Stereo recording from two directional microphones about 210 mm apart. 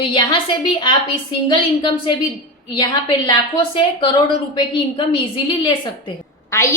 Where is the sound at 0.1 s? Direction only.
25° left (ahead or behind).